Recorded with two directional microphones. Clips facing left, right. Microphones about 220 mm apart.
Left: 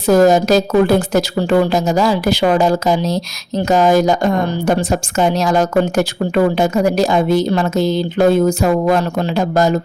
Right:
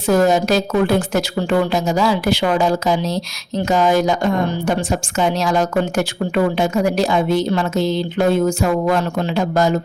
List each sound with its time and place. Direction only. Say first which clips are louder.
0.1 s a woman's voice: left 4 dB; 40° left (ahead or behind)